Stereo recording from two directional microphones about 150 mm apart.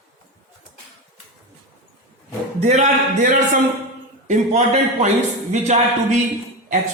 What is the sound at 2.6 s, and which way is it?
A man's voice, 50° right (ahead or behind).